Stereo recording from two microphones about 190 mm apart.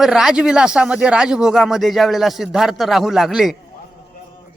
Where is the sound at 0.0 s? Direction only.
Centre (ahead or behind).